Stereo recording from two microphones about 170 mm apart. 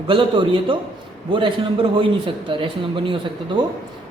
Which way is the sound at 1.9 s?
30° right (ahead or behind).